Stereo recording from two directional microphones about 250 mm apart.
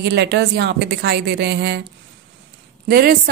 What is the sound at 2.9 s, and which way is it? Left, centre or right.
Speech, right.